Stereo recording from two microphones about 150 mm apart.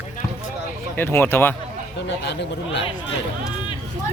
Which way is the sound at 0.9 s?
15° left (ahead or behind).